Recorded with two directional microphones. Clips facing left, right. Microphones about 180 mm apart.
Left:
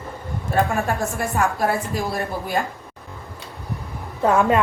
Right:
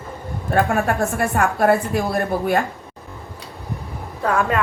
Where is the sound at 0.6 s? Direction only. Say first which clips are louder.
Right 3 dB; 60° right (ahead or behind).